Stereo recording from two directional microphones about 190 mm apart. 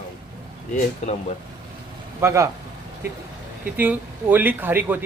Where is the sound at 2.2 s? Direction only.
15° right (ahead or behind).